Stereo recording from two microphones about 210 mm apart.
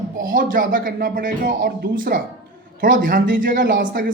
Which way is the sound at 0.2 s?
40° right (ahead or behind).